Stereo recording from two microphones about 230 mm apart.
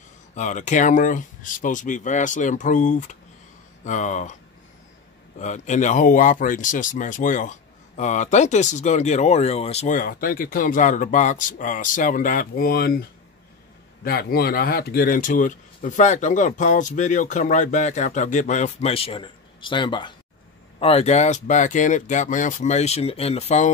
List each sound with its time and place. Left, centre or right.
0.3 s speech: left
5.4 s speech: left
14.0 s speech: left